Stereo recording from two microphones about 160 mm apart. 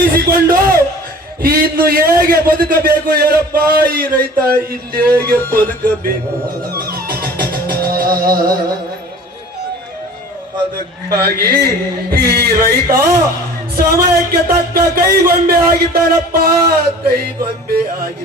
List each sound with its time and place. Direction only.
0.0 s music: 65° right (ahead or behind)
1.4 s a man's voice: 65° right (ahead or behind)
6.6 s music: 70° right (ahead or behind)
11.1 s a man's voice: 75° right (ahead or behind)